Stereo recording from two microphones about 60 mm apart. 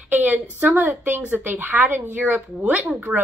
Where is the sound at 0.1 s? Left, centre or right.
Right.